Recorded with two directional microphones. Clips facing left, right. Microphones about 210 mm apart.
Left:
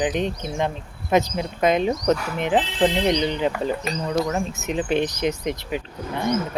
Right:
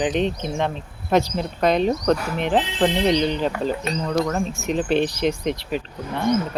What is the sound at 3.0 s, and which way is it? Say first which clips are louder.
Speech: right 1 dB; 15° left (ahead or behind).